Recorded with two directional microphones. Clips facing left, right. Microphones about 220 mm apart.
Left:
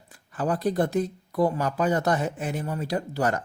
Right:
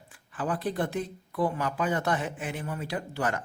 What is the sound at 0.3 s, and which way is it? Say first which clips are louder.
Speech: left 5 dB; 40° left (ahead or behind).